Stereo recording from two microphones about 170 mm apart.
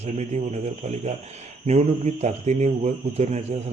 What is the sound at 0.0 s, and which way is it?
Speech, 40° right (ahead or behind).